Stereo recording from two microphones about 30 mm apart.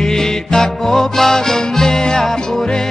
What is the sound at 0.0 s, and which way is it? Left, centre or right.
Music, centre.